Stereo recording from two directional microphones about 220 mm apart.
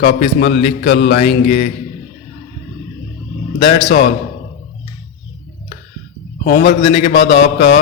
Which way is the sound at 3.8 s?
45° left (ahead or behind).